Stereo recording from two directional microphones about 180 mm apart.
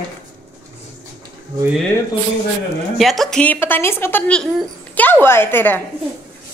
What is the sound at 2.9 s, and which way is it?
Speech, centre (ahead or behind).